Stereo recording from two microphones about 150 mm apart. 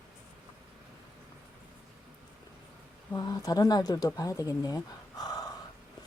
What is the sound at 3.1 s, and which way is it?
Speech, 25° left (ahead or behind).